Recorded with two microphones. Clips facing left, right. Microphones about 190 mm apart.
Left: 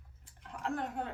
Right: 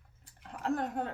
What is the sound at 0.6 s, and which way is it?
Speech, 40° right (ahead or behind).